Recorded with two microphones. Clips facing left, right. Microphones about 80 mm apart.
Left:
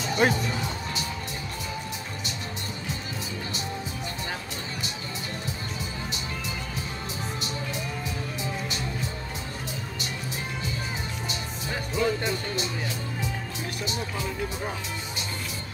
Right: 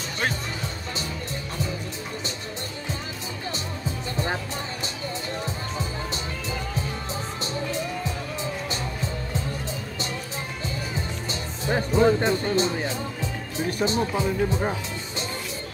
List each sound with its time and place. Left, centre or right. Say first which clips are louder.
0.2 s speech: left 5 dB; centre
11.2 s music: right 5 dB; right